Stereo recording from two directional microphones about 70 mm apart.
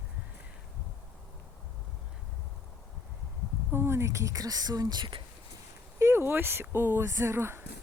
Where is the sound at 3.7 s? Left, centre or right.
Right.